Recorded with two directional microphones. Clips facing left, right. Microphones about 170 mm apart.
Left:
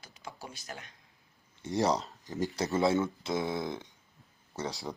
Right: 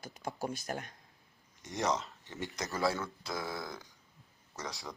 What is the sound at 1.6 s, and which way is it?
Speech, 30° left (ahead or behind).